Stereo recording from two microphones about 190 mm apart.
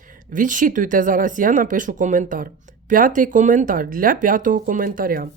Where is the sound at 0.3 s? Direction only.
45° right (ahead or behind).